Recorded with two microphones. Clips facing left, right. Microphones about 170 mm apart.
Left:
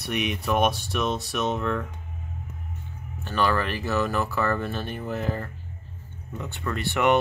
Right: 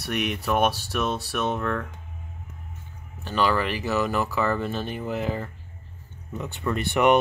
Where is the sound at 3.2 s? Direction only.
15° right (ahead or behind).